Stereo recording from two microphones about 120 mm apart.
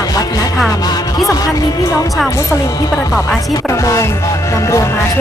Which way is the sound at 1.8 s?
25° left (ahead or behind).